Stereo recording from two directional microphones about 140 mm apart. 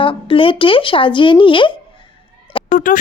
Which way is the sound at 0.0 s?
40° left (ahead or behind).